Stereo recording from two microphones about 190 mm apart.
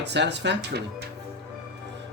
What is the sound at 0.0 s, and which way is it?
Speech, 65° right (ahead or behind).